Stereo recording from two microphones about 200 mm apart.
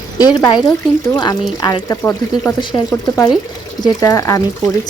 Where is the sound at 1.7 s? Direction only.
15° left (ahead or behind).